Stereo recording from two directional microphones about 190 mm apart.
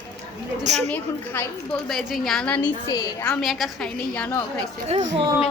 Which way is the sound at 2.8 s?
20° left (ahead or behind).